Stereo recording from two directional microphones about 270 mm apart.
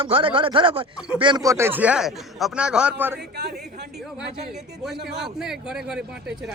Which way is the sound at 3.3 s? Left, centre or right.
Right.